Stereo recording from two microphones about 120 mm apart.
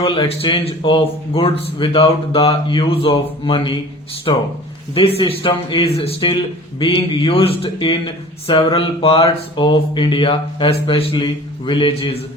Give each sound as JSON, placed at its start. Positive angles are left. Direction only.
{"t": 0.0, "sound": "a man's voice", "side_deg": 45}